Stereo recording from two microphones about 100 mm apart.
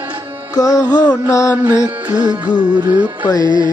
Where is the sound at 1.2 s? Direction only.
35° left (ahead or behind).